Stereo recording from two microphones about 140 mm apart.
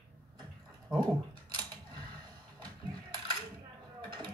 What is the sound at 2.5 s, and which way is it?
Music, 30° right (ahead or behind).